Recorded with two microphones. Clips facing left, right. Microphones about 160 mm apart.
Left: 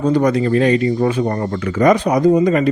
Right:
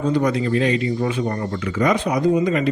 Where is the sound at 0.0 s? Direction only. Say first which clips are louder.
Left 4 dB; 45° left (ahead or behind).